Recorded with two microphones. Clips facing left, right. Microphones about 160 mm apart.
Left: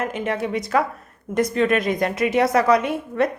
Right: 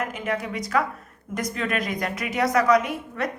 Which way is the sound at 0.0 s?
25° left (ahead or behind).